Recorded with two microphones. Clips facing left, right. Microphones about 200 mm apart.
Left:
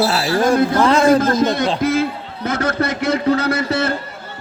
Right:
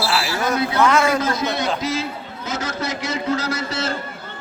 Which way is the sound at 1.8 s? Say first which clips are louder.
Left 7 dB; 55° left (ahead or behind).